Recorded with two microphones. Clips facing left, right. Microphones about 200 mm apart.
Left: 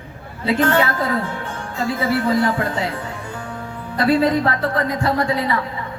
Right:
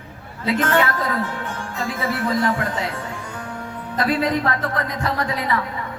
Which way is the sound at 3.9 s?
30° left (ahead or behind).